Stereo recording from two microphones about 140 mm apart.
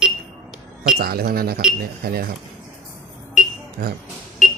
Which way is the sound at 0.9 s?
85° right.